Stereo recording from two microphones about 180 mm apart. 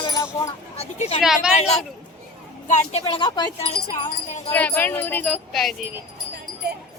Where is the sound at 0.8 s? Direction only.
35° left (ahead or behind).